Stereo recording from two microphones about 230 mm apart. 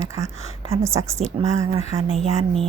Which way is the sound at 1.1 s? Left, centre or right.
Right.